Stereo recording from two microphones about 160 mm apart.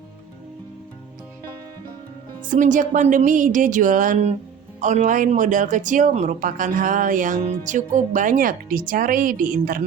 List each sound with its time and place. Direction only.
2.4 s speech: 55° right (ahead or behind)